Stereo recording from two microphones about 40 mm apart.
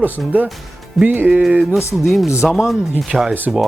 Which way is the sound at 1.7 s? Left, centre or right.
Centre.